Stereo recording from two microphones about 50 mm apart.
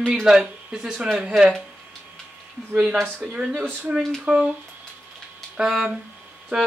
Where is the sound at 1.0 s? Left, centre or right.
Right.